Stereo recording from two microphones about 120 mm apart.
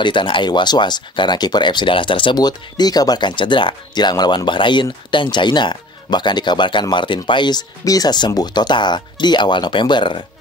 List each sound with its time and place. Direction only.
0.0 s speech: 40° left (ahead or behind)